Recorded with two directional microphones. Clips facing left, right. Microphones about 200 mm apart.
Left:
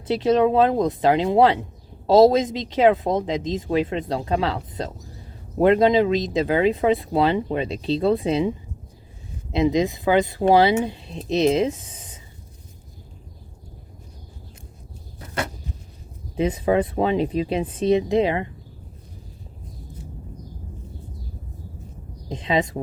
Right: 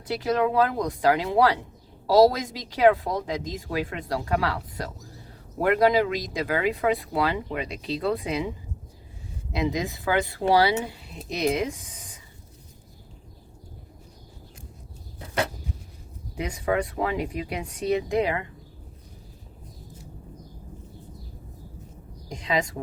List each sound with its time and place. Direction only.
0.1 s speech: 25° left (ahead or behind)
16.3 s speech: 25° left (ahead or behind)
22.3 s a sound: 25° left (ahead or behind)